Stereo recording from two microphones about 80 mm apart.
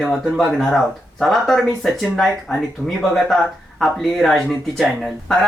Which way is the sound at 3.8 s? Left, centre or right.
Centre.